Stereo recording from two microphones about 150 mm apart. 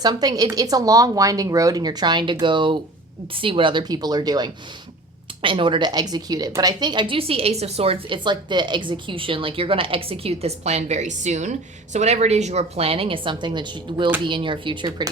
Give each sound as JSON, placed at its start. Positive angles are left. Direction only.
{"t": 0.0, "sound": "a woman's voice", "side_deg": -25}